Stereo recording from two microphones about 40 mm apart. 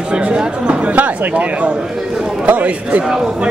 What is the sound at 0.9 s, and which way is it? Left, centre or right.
A man's voice, right.